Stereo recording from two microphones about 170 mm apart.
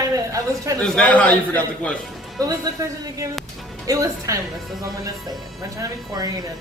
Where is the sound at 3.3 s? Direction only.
Centre (ahead or behind).